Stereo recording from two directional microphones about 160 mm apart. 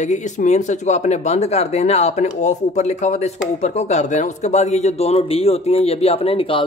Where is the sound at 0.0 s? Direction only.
50° left (ahead or behind).